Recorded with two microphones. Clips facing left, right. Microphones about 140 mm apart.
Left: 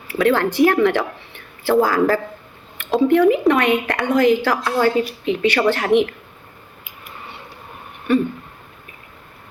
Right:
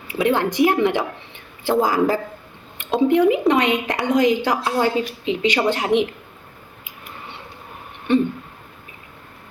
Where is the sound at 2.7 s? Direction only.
20° right (ahead or behind).